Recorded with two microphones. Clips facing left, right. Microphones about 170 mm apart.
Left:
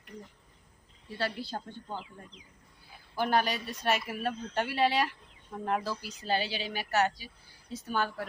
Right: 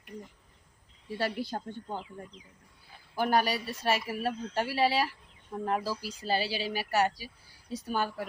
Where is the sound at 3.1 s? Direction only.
10° right (ahead or behind).